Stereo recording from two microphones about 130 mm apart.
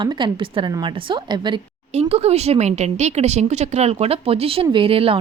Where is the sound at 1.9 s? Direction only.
55° right (ahead or behind).